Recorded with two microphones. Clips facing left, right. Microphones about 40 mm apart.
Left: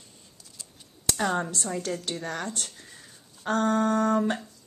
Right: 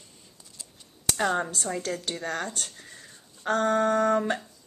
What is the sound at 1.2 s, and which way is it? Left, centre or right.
Speech, centre.